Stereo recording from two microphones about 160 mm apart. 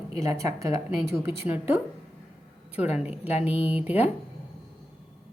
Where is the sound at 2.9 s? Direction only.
10° right (ahead or behind).